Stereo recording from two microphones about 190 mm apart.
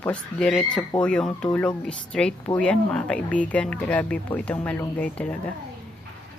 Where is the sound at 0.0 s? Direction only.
5° left (ahead or behind).